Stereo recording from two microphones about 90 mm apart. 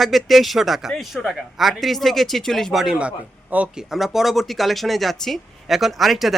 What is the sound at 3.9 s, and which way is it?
Speech, 5° right (ahead or behind).